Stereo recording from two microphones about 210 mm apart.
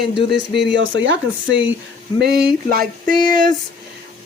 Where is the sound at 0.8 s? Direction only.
60° right (ahead or behind).